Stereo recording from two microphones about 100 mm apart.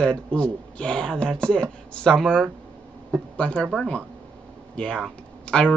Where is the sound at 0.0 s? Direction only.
10° left (ahead or behind).